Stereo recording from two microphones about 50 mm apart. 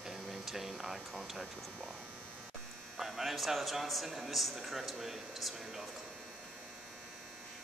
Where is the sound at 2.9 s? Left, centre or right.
Centre.